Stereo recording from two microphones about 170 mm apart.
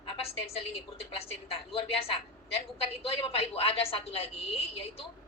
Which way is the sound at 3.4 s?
35° left (ahead or behind).